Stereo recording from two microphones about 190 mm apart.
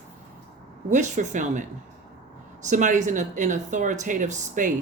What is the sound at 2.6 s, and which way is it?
Speech, 40° right (ahead or behind).